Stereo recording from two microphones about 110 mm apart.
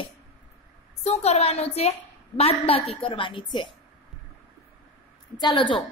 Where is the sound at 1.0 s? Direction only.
80° left; by 2.9 s 65° left (ahead or behind).